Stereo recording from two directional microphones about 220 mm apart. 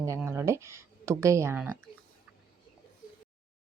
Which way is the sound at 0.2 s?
10° right (ahead or behind).